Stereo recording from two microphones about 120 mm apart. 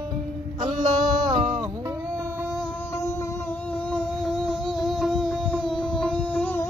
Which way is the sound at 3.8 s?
5° left (ahead or behind).